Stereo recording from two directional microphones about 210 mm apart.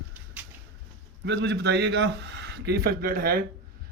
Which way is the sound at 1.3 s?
55° right (ahead or behind).